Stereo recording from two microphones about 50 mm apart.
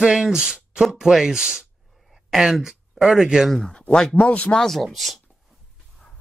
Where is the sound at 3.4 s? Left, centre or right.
Centre.